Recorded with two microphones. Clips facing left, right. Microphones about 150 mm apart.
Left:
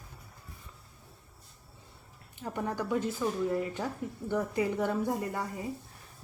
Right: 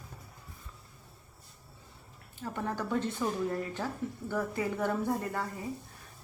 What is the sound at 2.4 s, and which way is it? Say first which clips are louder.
Speech: left 1 dB; 15° left (ahead or behind).